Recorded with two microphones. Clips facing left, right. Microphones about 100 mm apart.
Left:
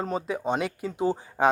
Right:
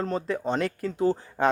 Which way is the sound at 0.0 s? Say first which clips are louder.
Right 1 dB; 10° left (ahead or behind).